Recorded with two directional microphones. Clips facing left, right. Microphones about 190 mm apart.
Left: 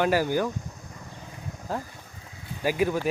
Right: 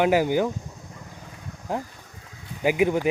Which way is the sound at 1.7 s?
15° right (ahead or behind).